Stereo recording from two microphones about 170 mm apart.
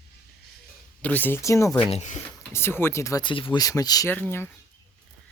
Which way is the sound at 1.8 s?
40° left (ahead or behind).